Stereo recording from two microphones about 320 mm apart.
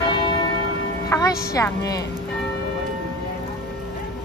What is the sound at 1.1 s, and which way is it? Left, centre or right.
Music, centre.